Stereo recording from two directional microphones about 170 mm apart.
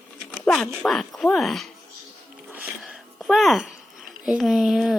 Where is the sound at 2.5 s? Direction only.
10° right (ahead or behind).